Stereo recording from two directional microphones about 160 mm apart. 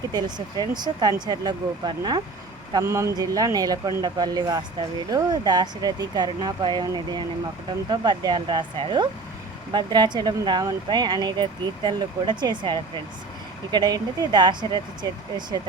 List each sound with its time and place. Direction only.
0.1 s speech: 25° right (ahead or behind)